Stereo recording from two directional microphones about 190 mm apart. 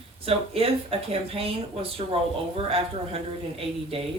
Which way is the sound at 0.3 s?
30° right (ahead or behind).